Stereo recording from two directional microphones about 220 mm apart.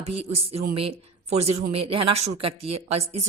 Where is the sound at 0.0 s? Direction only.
30° right (ahead or behind).